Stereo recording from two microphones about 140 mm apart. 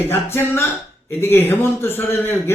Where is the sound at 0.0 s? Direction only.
15° left (ahead or behind).